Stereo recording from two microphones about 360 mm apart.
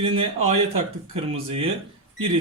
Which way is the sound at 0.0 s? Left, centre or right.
Centre.